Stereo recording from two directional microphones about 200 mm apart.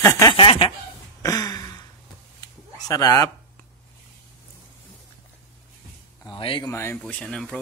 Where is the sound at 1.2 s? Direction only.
20° left (ahead or behind).